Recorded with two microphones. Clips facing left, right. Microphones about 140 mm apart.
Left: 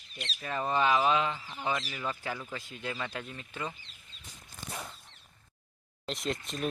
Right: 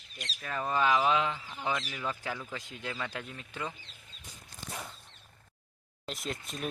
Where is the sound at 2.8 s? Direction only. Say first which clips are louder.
Left 1 dB; 10° left (ahead or behind).